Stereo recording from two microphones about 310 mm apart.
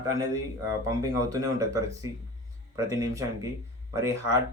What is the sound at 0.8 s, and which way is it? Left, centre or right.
Speech, centre.